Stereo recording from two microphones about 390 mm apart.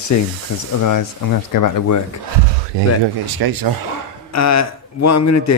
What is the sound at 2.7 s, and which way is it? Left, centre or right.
Speech, right.